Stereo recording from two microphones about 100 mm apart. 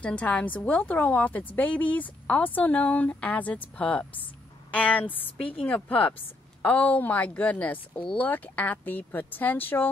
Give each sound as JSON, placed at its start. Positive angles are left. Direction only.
{"t": 0.0, "sound": "a woman's voice", "side_deg": 10}